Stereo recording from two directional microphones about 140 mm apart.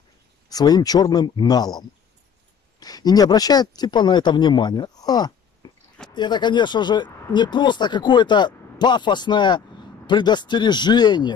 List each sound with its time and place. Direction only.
0.5 s speech: 30° left (ahead or behind)